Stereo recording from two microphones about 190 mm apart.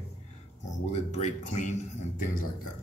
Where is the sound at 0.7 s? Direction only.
35° left (ahead or behind).